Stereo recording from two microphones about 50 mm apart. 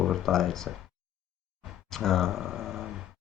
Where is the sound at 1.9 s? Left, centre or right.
Centre.